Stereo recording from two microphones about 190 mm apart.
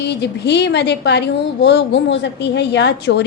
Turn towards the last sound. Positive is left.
turn(degrees=65)  # may be behind; listen again after turning